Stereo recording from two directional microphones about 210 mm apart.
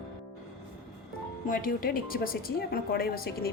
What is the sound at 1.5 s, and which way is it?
Speech, 40° left (ahead or behind).